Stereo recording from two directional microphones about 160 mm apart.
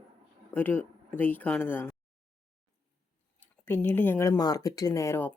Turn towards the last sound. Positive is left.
turn(degrees=15)  # may be behind; listen again after turning